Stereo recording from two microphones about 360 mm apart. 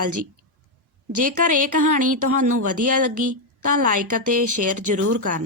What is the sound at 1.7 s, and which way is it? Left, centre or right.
A woman's voice, right.